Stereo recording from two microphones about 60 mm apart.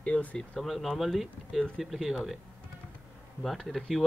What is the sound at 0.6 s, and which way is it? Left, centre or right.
Speech, centre.